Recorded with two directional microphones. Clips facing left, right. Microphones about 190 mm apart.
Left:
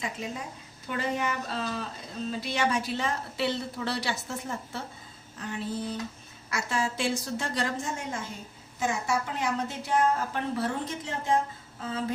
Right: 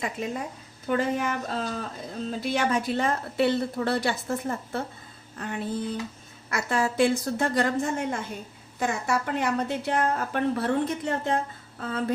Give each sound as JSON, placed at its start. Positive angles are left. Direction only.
{"t": 0.0, "sound": "a woman's voice", "side_deg": -55}